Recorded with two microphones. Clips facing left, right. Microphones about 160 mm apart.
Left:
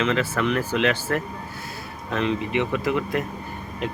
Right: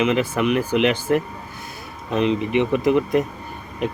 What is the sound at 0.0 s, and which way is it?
Speech, 15° right (ahead or behind).